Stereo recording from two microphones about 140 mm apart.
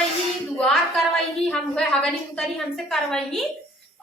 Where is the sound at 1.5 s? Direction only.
5° left (ahead or behind).